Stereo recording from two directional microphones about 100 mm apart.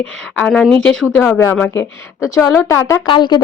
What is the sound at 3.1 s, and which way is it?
Speech, 45° left (ahead or behind).